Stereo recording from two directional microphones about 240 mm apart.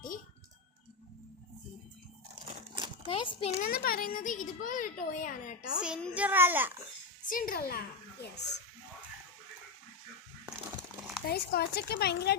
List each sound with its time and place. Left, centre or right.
2.3 s crumpling: centre
3.1 s a child's voice: left
3.6 s speech: left
5.8 s a child's voice: centre
7.3 s speech: left
11.3 s speech: left